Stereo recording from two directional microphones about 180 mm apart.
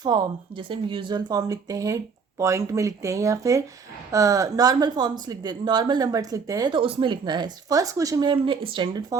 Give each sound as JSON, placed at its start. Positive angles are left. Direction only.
{"t": 0.0, "sound": "speech", "side_deg": -25}